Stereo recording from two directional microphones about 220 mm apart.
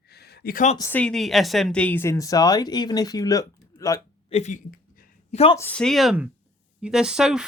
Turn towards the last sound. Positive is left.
turn(degrees=-5)  # may be behind; listen again after turning